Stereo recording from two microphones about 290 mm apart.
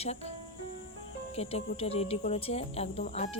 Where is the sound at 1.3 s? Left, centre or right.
Left.